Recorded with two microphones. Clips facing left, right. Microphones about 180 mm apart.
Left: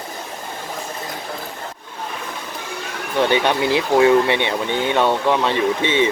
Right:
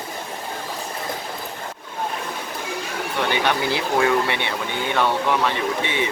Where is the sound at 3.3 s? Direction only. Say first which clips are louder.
Left 3 dB; 20° left (ahead or behind).